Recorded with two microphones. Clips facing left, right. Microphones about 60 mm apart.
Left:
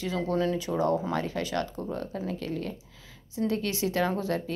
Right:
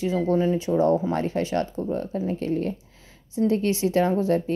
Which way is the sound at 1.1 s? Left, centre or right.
Right.